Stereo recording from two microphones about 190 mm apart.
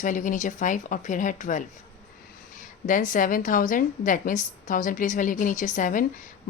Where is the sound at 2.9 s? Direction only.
45° left (ahead or behind).